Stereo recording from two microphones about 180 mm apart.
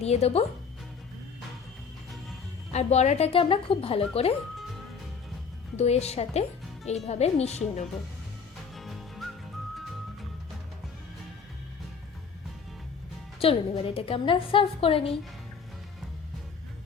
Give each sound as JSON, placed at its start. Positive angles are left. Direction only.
{"t": 0.0, "sound": "a woman's voice", "side_deg": 35}
{"t": 2.7, "sound": "a woman's voice", "side_deg": 40}
{"t": 5.7, "sound": "a woman's voice", "side_deg": 35}
{"t": 8.7, "sound": "music", "side_deg": 0}
{"t": 13.4, "sound": "a woman's voice", "side_deg": 30}